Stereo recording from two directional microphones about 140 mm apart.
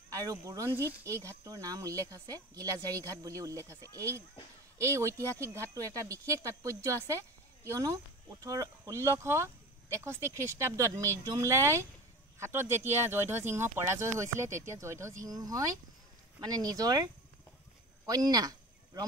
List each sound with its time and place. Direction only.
0.1 s speech: 25° right (ahead or behind)